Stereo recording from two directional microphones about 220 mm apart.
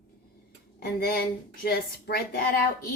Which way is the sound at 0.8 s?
45° left (ahead or behind).